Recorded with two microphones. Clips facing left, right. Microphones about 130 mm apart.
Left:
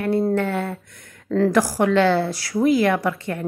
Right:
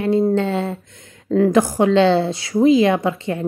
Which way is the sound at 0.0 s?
20° right (ahead or behind).